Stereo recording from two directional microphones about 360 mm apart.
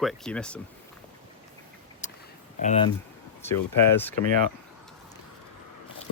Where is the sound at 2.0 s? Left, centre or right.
Centre.